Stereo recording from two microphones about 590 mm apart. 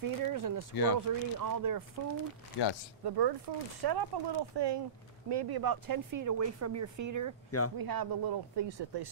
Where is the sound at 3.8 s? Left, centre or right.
Right.